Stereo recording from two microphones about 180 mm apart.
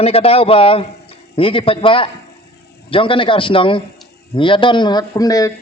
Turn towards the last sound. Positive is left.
turn(degrees=20)  # may be behind; listen again after turning